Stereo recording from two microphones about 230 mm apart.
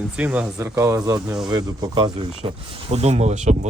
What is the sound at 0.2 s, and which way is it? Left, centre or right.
Speech, centre.